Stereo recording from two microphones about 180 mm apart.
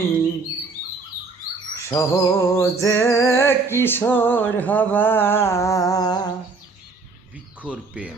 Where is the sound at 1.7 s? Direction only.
15° left (ahead or behind).